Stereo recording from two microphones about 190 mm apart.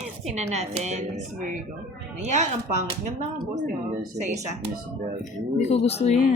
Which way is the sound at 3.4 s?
45° right (ahead or behind).